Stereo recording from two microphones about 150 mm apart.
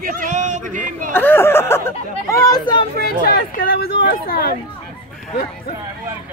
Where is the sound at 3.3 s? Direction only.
85° left.